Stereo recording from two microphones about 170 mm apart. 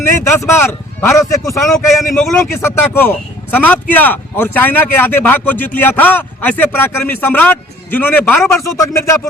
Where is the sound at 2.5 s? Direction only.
15° left (ahead or behind).